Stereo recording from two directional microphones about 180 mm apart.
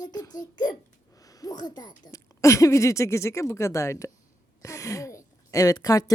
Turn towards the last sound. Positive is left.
turn(degrees=20)  # may be behind; listen again after turning